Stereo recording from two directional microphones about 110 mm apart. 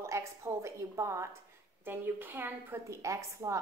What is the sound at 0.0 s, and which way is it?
A woman's voice, 25° right (ahead or behind).